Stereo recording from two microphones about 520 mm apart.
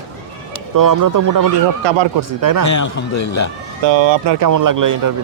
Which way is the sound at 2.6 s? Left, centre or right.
Left.